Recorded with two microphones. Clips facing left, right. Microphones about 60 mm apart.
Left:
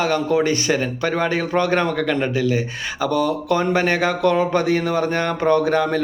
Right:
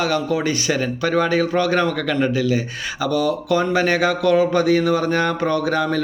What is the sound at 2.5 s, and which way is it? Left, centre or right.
Speech, left.